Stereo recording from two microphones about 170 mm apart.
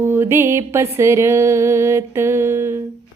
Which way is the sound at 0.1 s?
15° right (ahead or behind).